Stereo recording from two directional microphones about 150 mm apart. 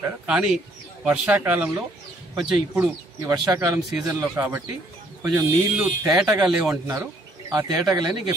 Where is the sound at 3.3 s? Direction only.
25° right (ahead or behind).